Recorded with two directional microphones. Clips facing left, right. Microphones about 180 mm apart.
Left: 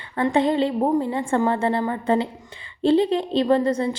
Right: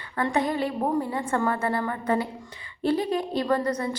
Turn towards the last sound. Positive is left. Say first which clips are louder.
# left 6 dB
turn(degrees=25)  # may be behind; listen again after turning